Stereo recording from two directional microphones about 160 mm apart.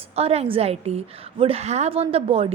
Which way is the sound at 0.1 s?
40° right (ahead or behind).